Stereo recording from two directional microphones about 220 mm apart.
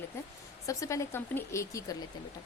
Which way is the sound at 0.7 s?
15° left (ahead or behind).